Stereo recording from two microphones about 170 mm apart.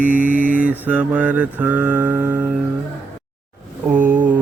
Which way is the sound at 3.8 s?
10° right (ahead or behind).